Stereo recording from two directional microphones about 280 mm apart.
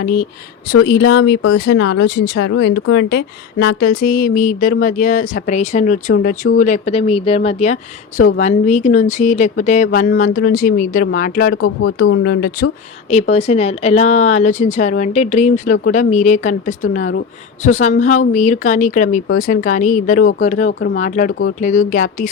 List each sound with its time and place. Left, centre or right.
0.0 s a woman's voice: left
11.5 s speech: left
12.2 s speech: left
13.1 s a woman's voice: left